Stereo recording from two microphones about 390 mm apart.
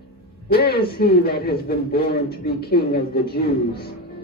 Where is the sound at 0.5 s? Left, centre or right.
Left.